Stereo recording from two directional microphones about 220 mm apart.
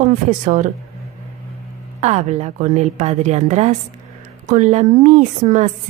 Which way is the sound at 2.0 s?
30° right (ahead or behind).